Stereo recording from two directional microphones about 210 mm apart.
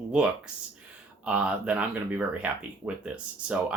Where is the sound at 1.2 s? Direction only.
5° right (ahead or behind).